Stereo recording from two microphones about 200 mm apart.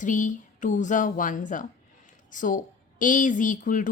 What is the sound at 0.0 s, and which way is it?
Speech, 40° left (ahead or behind).